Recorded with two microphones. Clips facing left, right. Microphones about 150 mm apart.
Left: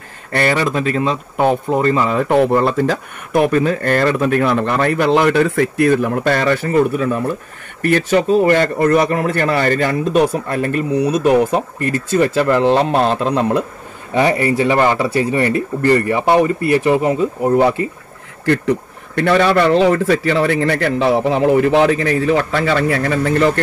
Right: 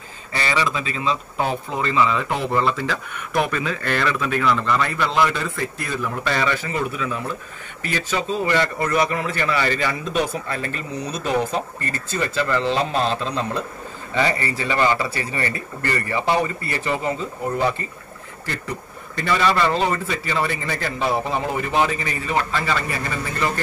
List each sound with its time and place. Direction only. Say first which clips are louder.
0.3 s a man's voice: left 7 dB; 55° left (ahead or behind)